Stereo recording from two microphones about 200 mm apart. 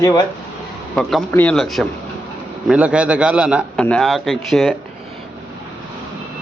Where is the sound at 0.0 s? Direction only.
20° left (ahead or behind).